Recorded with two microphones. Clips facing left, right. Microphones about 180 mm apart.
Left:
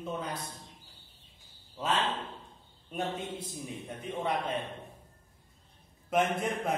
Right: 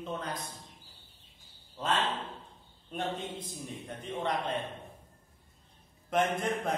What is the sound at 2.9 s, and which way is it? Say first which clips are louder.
A man's voice: left 1 dB; 5° left (ahead or behind).